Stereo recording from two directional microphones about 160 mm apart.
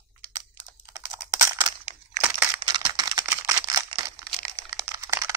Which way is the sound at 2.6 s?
30° right (ahead or behind).